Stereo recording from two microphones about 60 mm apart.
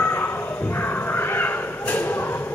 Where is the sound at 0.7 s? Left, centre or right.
Left.